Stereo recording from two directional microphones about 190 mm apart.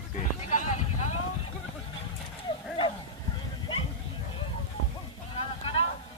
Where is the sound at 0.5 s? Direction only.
40° left (ahead or behind).